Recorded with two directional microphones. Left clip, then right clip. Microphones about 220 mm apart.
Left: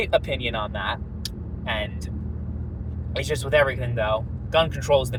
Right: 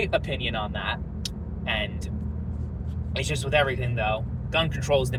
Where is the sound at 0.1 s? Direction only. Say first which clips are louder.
Left 4 dB; 25° left (ahead or behind).